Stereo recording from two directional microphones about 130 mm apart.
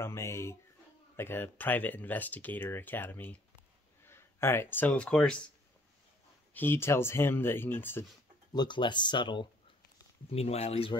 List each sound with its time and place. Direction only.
0.0 s speech: 20° left (ahead or behind)
6.5 s speech: 15° left (ahead or behind)
8.5 s speech: 35° left (ahead or behind)
10.3 s speech: 55° left (ahead or behind)